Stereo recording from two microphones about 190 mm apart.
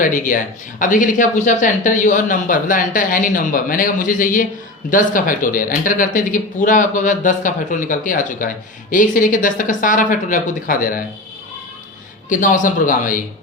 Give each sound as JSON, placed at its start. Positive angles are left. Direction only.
{"t": 0.0, "sound": "speech", "side_deg": 45}
{"t": 12.3, "sound": "speech", "side_deg": 45}